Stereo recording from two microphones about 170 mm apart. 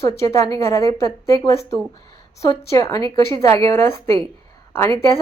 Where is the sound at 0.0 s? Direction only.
15° left (ahead or behind).